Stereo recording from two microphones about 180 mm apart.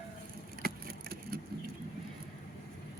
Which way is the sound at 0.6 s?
55° right (ahead or behind).